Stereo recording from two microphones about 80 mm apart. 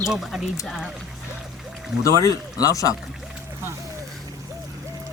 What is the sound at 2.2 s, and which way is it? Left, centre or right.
Speech, left.